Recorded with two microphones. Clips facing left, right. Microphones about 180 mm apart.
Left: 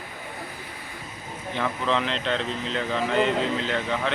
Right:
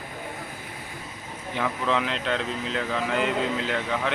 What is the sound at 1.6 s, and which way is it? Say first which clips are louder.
Speech: even; 10° right (ahead or behind).